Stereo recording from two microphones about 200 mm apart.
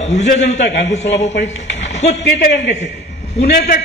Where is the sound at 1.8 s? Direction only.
35° left (ahead or behind).